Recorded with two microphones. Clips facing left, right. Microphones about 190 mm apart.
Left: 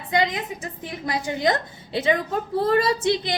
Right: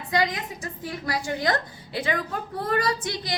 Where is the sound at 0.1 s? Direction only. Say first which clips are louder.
Left 2 dB; 20° left (ahead or behind).